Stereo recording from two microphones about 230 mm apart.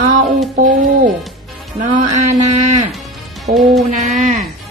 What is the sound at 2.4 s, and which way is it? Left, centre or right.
Speech, right.